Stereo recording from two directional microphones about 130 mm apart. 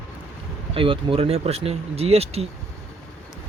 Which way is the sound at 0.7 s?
45° right (ahead or behind).